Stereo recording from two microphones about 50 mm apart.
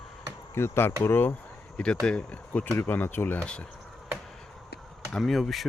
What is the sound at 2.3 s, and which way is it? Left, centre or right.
Speech, left.